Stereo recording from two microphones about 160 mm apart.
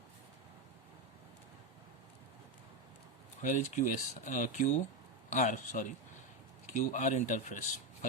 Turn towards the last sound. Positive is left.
turn(degrees=50)  # may be behind; listen again after turning